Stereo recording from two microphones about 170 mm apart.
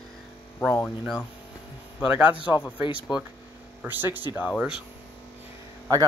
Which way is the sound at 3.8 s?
10° right (ahead or behind).